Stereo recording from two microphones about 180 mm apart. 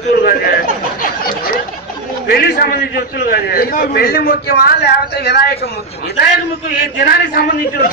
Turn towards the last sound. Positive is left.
turn(degrees=55)  # may be behind; listen again after turning